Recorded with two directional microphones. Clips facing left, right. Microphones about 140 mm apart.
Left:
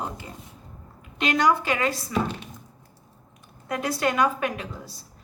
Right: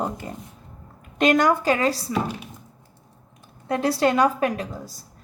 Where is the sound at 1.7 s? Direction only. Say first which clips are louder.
Right 4 dB; 35° right (ahead or behind).